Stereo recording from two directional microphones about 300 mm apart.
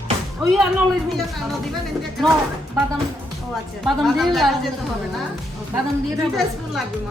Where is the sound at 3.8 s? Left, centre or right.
Centre.